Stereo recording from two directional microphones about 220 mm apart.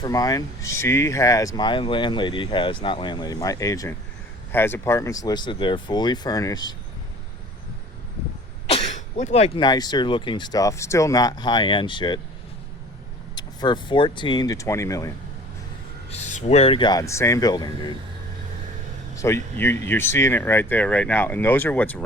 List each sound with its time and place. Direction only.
0.0 s speech: 15° left (ahead or behind)
8.7 s speech: 30° left (ahead or behind)
13.3 s speech: 20° left (ahead or behind)
16.0 s speech: 30° left (ahead or behind)
19.1 s speech: 15° left (ahead or behind)